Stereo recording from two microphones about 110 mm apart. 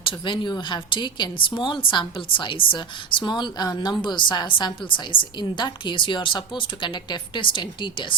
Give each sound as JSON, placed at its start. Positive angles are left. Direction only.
{"t": 0.0, "sound": "a woman's voice", "side_deg": 50}